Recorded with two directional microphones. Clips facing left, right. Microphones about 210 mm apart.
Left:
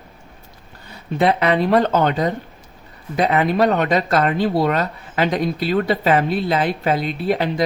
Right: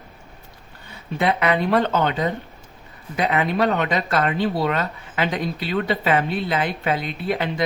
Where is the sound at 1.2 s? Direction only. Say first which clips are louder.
Left 3 dB; 35° left (ahead or behind).